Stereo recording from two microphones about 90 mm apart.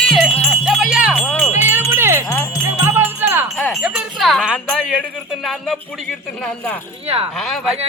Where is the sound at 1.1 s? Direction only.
15° left (ahead or behind).